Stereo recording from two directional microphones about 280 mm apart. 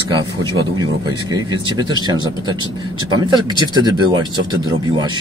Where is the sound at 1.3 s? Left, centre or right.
Centre.